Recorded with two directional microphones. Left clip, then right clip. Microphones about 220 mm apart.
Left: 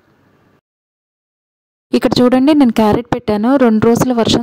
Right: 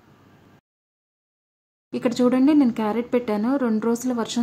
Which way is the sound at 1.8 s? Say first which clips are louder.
Left 10 dB; 45° left (ahead or behind).